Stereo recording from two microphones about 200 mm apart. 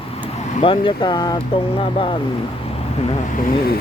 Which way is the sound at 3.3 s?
40° left (ahead or behind).